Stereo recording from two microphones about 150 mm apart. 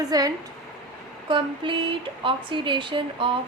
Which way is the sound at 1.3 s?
35° right (ahead or behind).